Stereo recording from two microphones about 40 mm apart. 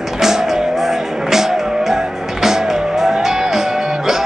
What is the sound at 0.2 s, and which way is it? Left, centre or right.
Music, centre.